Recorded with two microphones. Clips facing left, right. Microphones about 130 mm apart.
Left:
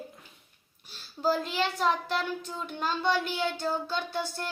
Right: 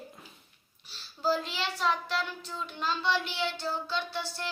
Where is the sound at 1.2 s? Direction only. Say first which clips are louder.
Left 3 dB; 50° left (ahead or behind).